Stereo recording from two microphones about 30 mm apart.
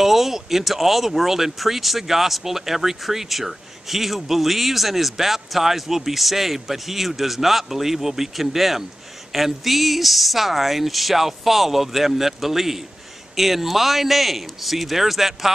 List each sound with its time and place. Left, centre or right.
0.0 s speech: centre